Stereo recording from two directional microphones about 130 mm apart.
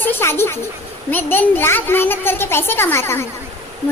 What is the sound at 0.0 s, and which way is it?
A child's voice, 20° left (ahead or behind).